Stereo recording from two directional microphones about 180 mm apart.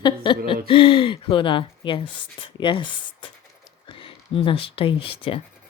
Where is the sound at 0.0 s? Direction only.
25° left (ahead or behind).